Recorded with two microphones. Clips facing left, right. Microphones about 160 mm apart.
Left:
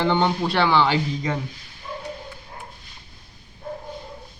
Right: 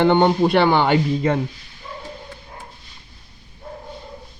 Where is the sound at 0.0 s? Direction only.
55° right (ahead or behind).